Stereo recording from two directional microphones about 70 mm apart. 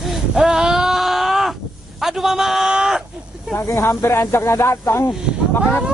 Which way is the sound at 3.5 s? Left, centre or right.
Left.